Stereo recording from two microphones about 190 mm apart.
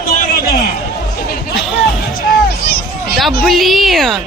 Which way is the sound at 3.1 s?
Centre (ahead or behind).